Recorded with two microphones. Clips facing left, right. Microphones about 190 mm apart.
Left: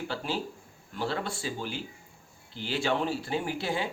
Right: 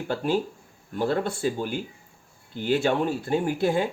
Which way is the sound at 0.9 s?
50° right (ahead or behind).